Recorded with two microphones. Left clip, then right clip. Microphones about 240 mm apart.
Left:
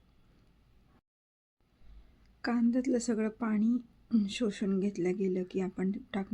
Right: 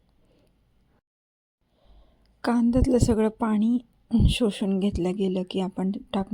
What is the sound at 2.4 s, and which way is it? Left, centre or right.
Speech, right.